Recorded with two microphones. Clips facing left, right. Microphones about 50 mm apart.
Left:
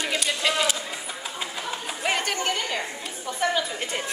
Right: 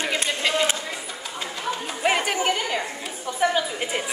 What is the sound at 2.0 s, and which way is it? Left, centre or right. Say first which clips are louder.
Chatter: right 4 dB; centre.